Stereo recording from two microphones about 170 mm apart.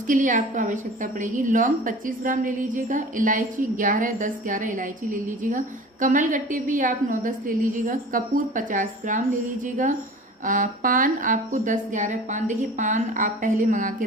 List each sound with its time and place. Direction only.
0.1 s a woman's voice: 50° right (ahead or behind)